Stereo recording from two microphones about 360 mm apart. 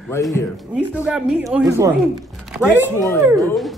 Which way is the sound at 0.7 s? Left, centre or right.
Centre.